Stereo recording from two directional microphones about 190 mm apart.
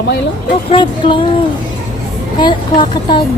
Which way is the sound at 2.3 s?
25° left (ahead or behind).